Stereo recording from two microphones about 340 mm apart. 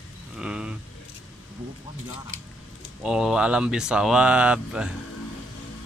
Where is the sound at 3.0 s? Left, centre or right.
Centre.